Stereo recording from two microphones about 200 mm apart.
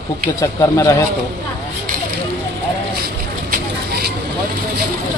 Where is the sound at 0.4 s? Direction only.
15° left (ahead or behind).